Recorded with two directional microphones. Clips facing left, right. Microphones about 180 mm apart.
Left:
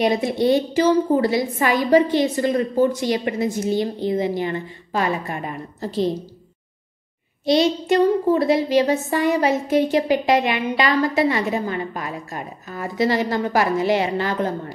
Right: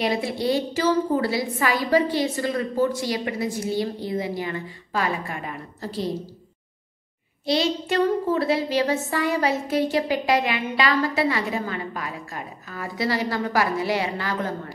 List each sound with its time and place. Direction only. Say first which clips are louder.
0.0 s child singing: left 5 dB; 20° left (ahead or behind)
7.4 s child singing: left 5 dB; 20° left (ahead or behind)